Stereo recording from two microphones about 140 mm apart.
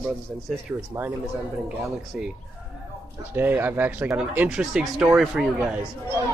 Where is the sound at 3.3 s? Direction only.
15° right (ahead or behind).